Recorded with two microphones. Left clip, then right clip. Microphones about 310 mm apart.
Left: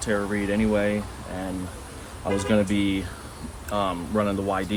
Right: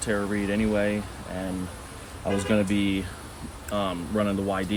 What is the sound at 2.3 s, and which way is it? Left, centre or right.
Speech, centre.